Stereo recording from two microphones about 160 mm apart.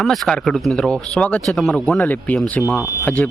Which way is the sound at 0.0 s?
Centre (ahead or behind).